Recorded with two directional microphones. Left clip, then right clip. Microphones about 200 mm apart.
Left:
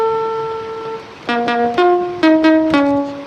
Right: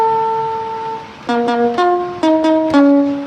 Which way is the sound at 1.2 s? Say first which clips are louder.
Right 1 dB; 20° left (ahead or behind).